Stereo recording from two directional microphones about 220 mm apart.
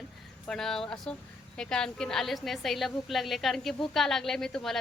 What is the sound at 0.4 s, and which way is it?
A woman's voice, centre (ahead or behind).